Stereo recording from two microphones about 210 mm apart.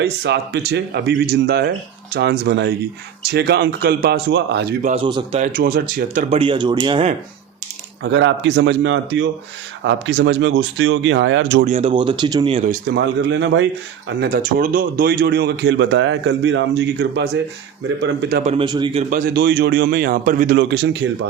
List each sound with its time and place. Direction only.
0.0 s a man's voice: 50° right (ahead or behind)
4.8 s speech: 35° right (ahead or behind)
5.0 s speech: 25° right (ahead or behind)
5.4 s speech: 40° right (ahead or behind)
6.4 s speech: 25° right (ahead or behind)
8.1 s speech: 55° right (ahead or behind)
11.6 s speech: 30° right (ahead or behind)
13.0 s speech: 55° right (ahead or behind)
14.2 s a man's voice: 45° right (ahead or behind)
18.4 s speech: 25° right (ahead or behind)
19.1 s a man's voice: 50° right (ahead or behind)
20.6 s speech: 55° right (ahead or behind)